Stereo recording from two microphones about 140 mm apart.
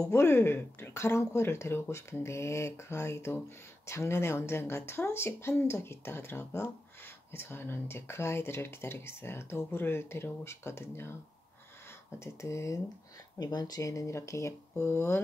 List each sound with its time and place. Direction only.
0.0 s speech: 20° left (ahead or behind)
12.2 s speech: 20° left (ahead or behind)